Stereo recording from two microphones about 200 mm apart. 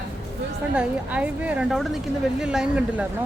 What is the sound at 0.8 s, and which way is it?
A woman's voice, 5° right (ahead or behind).